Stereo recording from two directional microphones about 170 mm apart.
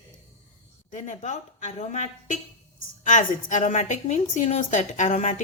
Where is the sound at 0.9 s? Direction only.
40° left (ahead or behind).